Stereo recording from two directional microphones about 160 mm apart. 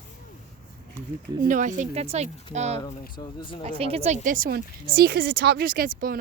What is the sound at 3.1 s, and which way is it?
Speech, 30° left (ahead or behind).